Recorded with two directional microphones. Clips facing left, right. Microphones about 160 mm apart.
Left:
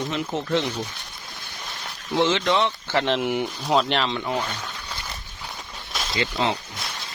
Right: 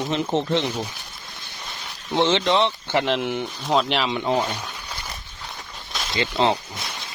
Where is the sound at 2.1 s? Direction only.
25° right (ahead or behind).